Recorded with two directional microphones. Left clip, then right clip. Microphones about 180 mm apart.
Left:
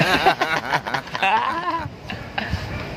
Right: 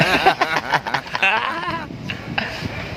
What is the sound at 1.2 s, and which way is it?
Speech, 20° left (ahead or behind).